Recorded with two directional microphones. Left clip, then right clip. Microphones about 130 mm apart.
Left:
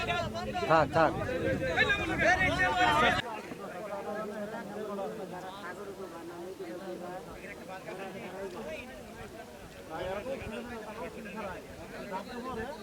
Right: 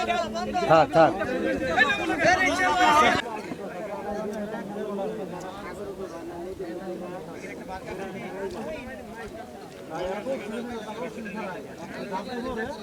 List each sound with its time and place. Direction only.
0.0 s speech: centre (ahead or behind)
0.7 s speech: 25° left (ahead or behind)
1.2 s speech: centre (ahead or behind)
10.0 s speech: centre (ahead or behind)